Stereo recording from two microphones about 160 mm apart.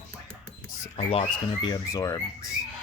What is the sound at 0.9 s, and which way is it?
Speech, 40° left (ahead or behind).